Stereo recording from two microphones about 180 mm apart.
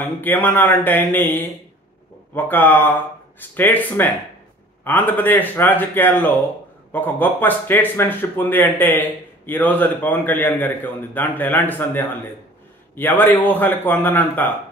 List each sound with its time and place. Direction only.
0.0 s speech: 10° left (ahead or behind)